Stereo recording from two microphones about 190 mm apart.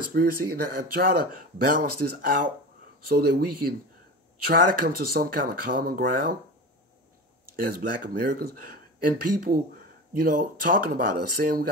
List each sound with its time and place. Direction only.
0.1 s speech: 50° right (ahead or behind)
7.5 s speech: 50° right (ahead or behind)